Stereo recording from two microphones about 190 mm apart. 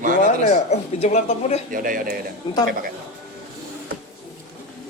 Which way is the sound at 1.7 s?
45° right (ahead or behind).